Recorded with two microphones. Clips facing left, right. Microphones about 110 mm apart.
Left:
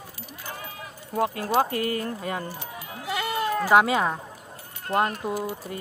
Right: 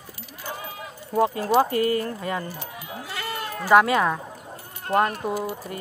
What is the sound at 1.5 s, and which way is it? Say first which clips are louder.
Speech: right 4 dB; 5° left (ahead or behind).